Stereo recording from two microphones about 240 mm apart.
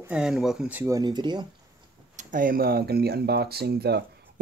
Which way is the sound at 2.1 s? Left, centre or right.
Right.